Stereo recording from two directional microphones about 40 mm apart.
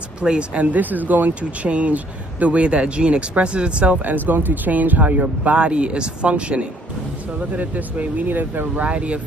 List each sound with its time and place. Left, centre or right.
0.2 s speech: right
0.7 s speech: right
1.4 s speech: right
4.0 s speech: right
7.5 s speech: right
8.8 s speech: right